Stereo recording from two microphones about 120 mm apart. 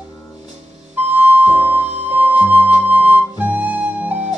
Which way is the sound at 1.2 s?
15° right (ahead or behind).